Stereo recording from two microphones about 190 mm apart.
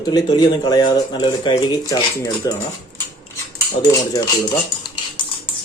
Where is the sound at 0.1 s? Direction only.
20° left (ahead or behind).